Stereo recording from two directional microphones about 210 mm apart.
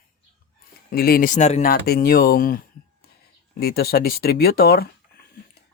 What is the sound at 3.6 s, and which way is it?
A man's voice, 45° left (ahead or behind).